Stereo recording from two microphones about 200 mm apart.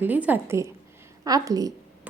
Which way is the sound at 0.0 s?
10° right (ahead or behind).